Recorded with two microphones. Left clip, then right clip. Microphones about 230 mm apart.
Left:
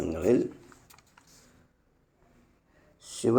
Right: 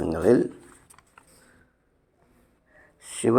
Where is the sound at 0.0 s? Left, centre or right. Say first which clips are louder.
Right 5 dB; centre.